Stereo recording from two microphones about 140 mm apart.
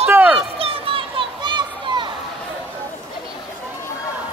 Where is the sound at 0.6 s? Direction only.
40° right (ahead or behind).